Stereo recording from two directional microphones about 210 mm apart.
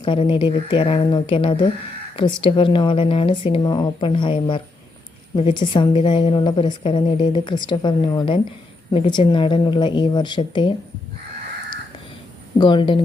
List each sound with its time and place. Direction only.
0.0 s a woman's voice: 25° left (ahead or behind)
12.5 s a woman's voice: 20° left (ahead or behind)